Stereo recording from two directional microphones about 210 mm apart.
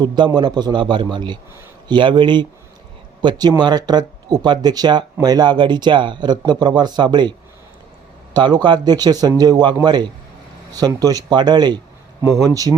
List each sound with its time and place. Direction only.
0.0 s speech: 20° right (ahead or behind)